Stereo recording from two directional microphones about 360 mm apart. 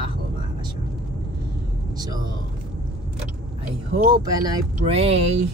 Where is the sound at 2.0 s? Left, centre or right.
Centre.